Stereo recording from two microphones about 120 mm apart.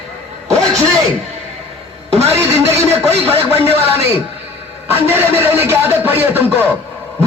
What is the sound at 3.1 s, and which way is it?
Speech, 55° right (ahead or behind).